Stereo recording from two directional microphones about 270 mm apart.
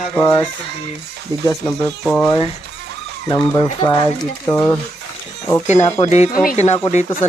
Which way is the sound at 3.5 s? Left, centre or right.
Centre.